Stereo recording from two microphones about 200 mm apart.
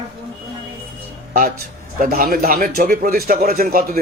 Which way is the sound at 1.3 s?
45° right (ahead or behind).